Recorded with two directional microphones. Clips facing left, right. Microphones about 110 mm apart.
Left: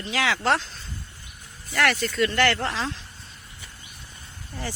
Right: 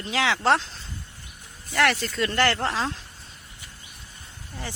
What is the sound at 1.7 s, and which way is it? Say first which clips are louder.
Speech: even; 25° right (ahead or behind).